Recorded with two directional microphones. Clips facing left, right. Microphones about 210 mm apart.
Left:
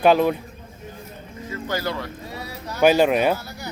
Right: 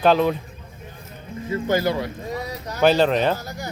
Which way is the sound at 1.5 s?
20° right (ahead or behind).